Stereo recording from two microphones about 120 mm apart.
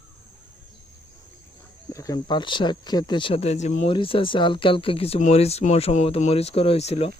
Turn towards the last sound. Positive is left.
turn(degrees=60)  # may be behind; listen again after turning